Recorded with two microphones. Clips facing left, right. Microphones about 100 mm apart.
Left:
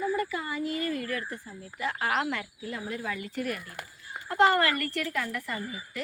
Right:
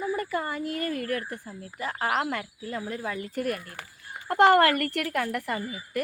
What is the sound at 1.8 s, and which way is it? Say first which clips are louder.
Speech: right 1 dB; 35° right (ahead or behind).